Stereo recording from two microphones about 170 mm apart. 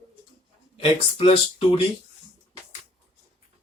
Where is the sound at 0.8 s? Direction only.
35° left (ahead or behind).